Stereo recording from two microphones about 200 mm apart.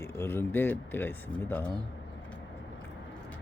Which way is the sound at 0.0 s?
10° left (ahead or behind).